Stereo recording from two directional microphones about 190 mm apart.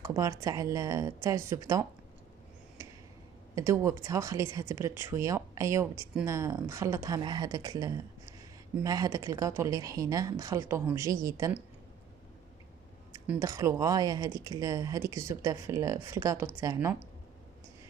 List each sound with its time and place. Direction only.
0.0 s speech: 15° right (ahead or behind)
3.5 s speech: 15° right (ahead or behind)
13.3 s speech: 15° right (ahead or behind)